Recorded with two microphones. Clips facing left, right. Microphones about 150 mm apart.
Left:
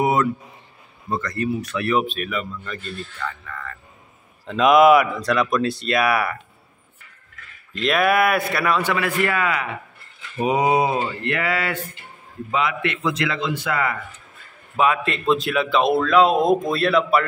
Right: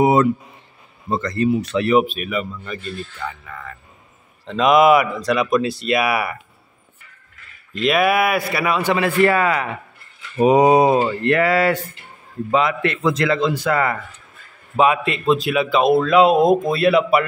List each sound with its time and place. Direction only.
0.0 s speech: 25° right (ahead or behind)
2.0 s speech: 10° right (ahead or behind)
4.5 s speech: centre (ahead or behind)
7.7 s speech: 5° right (ahead or behind)
8.9 s a man's voice: 30° right (ahead or behind)
15.0 s speech: centre (ahead or behind)